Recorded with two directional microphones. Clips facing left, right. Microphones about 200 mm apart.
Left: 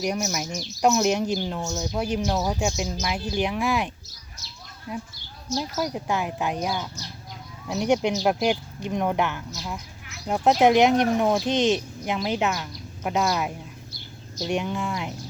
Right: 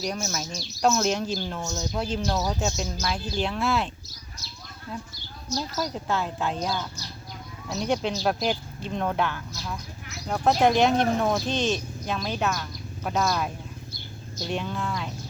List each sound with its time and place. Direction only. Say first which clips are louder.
0.0 s speech: left 4 dB; 15° left (ahead or behind)